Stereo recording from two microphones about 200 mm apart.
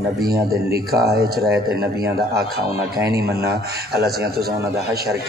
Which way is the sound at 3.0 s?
50° right (ahead or behind).